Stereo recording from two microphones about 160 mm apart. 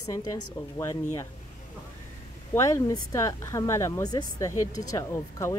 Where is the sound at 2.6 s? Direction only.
20° left (ahead or behind).